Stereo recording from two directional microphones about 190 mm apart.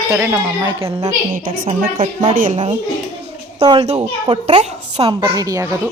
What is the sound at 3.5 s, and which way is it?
A child's voice, 30° right (ahead or behind).